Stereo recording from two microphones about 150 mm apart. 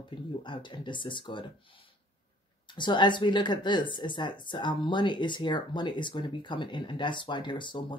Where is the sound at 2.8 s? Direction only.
30° left (ahead or behind).